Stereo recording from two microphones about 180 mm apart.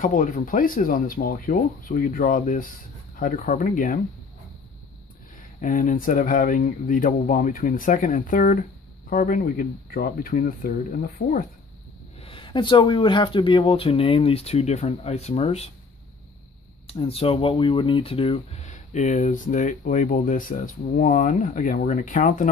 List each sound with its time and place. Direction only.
0.0 s speech: 45° left (ahead or behind)
5.6 s speech: 45° left (ahead or behind)
12.2 s speech: 30° left (ahead or behind)
16.8 s speech: 30° left (ahead or behind); by 22.5 s 45° left (ahead or behind)